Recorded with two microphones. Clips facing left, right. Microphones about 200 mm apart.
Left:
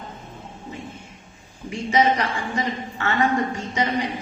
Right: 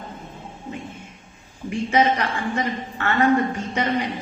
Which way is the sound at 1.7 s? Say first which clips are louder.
Even; 60° right (ahead or behind).